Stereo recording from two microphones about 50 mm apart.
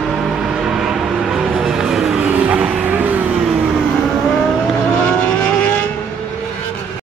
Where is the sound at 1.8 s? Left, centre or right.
Centre.